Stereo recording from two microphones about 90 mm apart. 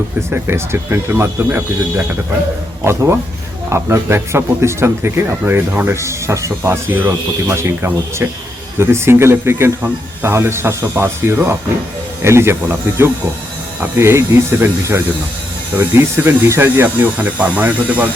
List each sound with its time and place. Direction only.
0.2 s speech: 25° right (ahead or behind)
15.7 s speech: 20° right (ahead or behind)